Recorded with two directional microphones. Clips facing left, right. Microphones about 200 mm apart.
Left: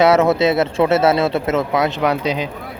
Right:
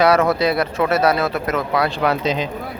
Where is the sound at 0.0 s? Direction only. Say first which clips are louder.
Left 2 dB; 25° left (ahead or behind).